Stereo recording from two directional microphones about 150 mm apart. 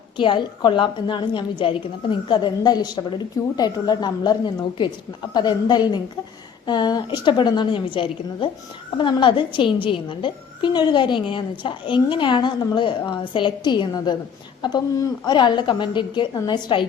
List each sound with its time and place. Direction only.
0.2 s a woman's voice: 30° left (ahead or behind)